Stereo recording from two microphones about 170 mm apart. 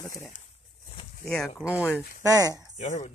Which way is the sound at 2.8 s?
45° left (ahead or behind).